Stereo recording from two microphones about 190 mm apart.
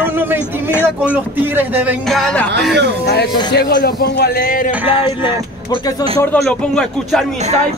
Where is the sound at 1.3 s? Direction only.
10° right (ahead or behind).